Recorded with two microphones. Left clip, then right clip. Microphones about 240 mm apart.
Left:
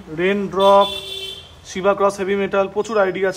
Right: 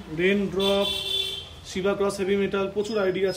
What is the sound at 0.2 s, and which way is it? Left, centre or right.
Speech, left.